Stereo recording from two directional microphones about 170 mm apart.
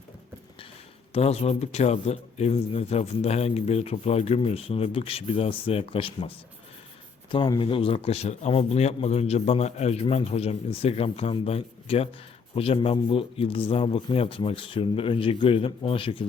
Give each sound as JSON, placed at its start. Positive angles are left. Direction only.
{"t": 1.1, "sound": "speech", "side_deg": 40}